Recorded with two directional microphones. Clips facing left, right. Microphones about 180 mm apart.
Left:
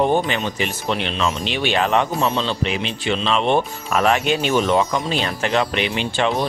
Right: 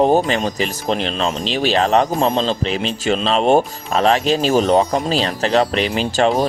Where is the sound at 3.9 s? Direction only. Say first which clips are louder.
Right 2 dB; 30° right (ahead or behind).